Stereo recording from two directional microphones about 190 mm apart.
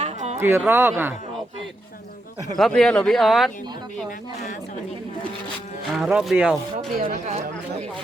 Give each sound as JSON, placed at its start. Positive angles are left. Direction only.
{"t": 0.0, "sound": "a sound", "side_deg": -40}
{"t": 0.3, "sound": "speech", "side_deg": -15}
{"t": 2.6, "sound": "speech", "side_deg": 5}
{"t": 6.0, "sound": "speech", "side_deg": 0}
{"t": 7.0, "sound": "speech", "side_deg": -35}